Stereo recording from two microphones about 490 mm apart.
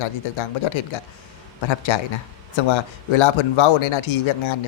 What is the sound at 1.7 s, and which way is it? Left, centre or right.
Speech, left.